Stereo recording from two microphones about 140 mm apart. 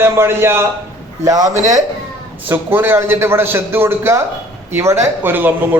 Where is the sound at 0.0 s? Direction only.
15° right (ahead or behind).